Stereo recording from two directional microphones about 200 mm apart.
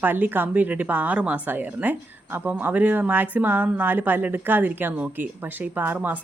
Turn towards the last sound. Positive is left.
turn(degrees=-10)  # may be behind; listen again after turning